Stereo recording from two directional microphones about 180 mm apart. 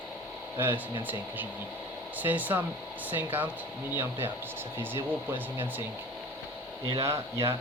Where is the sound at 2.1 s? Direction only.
10° right (ahead or behind).